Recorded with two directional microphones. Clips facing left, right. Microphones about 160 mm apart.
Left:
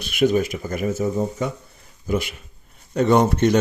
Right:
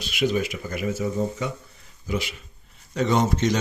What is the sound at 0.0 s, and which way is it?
Speech, 55° left (ahead or behind).